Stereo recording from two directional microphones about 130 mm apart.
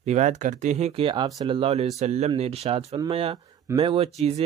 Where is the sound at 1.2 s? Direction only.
30° right (ahead or behind).